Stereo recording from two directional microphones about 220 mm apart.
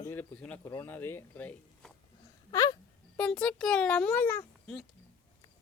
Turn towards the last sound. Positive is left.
turn(degrees=10)  # may be behind; listen again after turning